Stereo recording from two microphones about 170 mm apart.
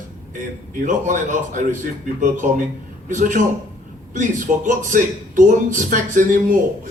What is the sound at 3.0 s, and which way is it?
A man's voice, 50° right (ahead or behind).